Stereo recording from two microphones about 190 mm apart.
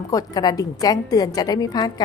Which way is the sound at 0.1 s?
20° left (ahead or behind).